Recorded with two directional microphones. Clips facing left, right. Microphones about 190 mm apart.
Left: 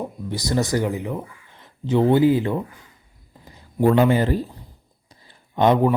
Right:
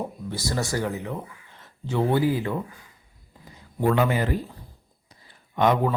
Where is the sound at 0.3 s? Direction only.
20° left (ahead or behind).